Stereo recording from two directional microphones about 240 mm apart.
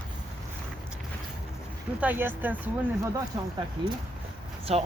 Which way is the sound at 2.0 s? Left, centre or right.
Centre.